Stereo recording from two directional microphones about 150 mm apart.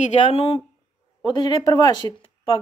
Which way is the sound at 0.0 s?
45° left (ahead or behind).